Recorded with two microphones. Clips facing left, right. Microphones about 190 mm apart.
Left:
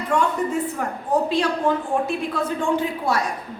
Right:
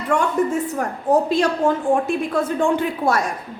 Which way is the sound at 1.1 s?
45° right (ahead or behind).